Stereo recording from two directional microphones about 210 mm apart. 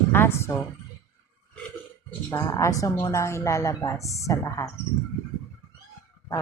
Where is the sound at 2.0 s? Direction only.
10° left (ahead or behind).